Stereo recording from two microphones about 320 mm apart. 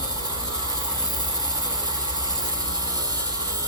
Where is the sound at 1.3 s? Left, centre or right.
Centre.